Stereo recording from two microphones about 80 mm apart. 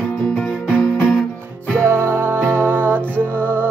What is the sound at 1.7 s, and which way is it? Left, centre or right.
Music, right.